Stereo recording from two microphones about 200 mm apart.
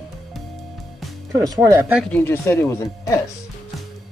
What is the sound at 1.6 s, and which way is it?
Speech, 15° right (ahead or behind).